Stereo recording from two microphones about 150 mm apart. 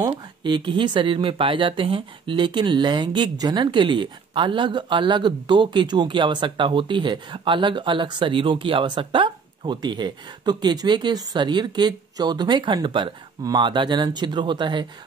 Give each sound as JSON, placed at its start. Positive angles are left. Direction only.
{"t": 0.0, "sound": "speech", "side_deg": -30}